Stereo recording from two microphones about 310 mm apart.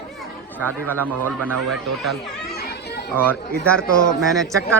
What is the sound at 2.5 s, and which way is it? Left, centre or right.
Chatter, left.